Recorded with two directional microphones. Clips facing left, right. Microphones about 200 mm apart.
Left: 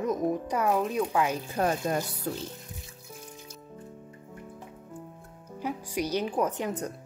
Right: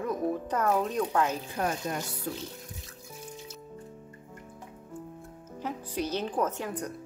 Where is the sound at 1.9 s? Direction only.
35° left (ahead or behind).